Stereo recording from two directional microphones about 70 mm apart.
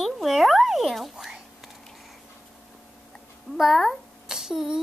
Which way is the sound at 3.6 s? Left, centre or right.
Centre.